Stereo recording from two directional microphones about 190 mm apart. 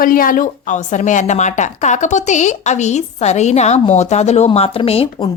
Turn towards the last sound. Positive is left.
turn(degrees=30)  # may be behind; listen again after turning